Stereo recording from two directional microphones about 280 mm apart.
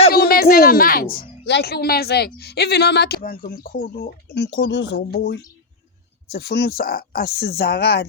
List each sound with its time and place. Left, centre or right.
0.1 s speech: left